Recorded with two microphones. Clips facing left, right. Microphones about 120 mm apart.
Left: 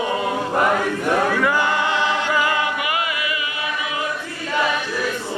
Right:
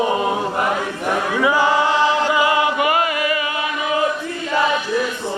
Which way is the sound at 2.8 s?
40° right (ahead or behind).